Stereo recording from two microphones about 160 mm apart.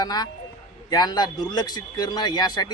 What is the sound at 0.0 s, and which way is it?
Speech, 25° left (ahead or behind).